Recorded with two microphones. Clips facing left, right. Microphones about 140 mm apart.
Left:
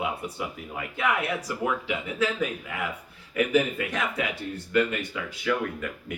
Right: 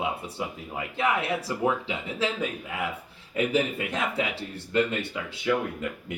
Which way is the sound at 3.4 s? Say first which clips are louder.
Left 2 dB; 25° right (ahead or behind).